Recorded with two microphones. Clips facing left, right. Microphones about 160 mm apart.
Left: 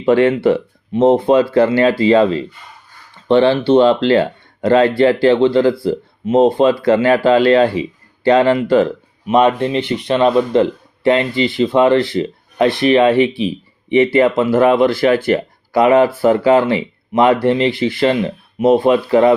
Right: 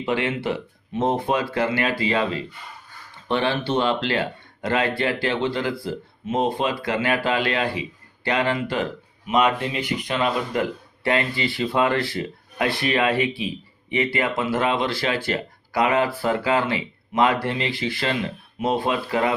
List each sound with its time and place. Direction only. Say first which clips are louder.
0.1 s speech: left 13 dB; 40° left (ahead or behind)
14.7 s speech: left 11 dB; 45° left (ahead or behind)
15.7 s speech: left 10 dB; 25° left (ahead or behind)
18.1 s speech: left 9 dB; 40° left (ahead or behind)